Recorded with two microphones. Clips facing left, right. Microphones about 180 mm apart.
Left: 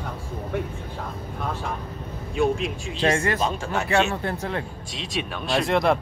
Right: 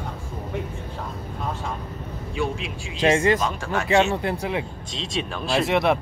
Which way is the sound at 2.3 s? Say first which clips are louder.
Left 5 dB; 45° left (ahead or behind).